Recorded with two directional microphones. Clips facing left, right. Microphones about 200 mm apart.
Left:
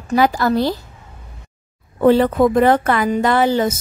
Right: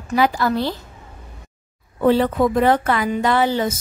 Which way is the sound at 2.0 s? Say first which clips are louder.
Left 3 dB; 50° left (ahead or behind).